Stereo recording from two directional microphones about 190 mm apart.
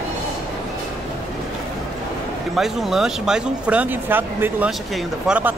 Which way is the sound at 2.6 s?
Centre (ahead or behind).